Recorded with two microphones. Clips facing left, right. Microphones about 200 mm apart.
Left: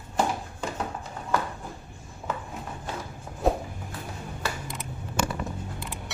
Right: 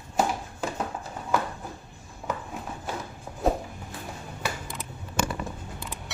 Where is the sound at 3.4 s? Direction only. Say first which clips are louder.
Even; centre (ahead or behind).